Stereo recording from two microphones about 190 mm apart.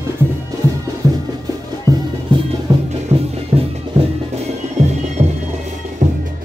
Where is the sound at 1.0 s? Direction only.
15° right (ahead or behind).